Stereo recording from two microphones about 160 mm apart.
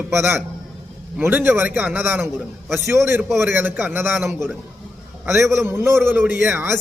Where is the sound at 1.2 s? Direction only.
15° right (ahead or behind).